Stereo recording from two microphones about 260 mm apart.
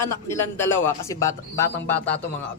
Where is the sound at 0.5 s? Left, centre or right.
Centre.